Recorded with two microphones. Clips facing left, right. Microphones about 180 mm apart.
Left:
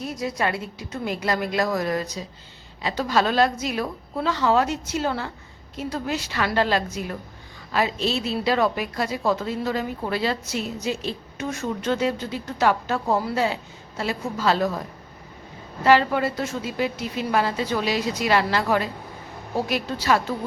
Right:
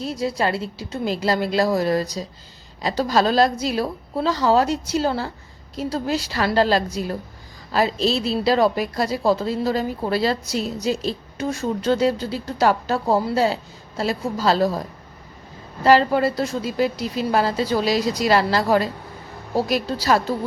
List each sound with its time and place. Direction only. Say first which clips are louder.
0.0 s a woman's voice: right 3 dB; 30° right (ahead or behind)